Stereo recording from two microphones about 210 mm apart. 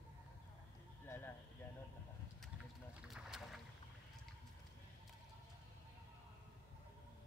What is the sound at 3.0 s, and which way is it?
Boat, centre (ahead or behind).